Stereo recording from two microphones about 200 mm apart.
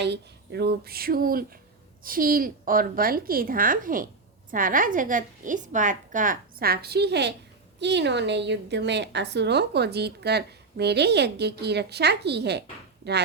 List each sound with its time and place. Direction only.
0.0 s a woman's voice: 55° right (ahead or behind)